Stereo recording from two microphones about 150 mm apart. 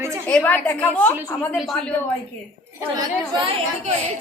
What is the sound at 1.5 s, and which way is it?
Speech, centre (ahead or behind).